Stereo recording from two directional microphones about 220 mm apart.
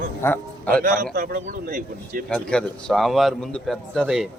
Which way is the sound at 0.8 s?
40° right (ahead or behind).